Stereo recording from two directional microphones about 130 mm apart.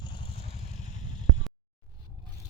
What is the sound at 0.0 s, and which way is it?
Vehicle, 35° left (ahead or behind).